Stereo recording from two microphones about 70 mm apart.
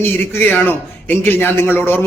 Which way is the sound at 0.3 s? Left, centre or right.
Left.